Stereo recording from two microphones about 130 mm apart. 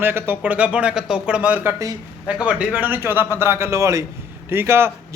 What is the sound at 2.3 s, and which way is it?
A man's voice, 10° right (ahead or behind).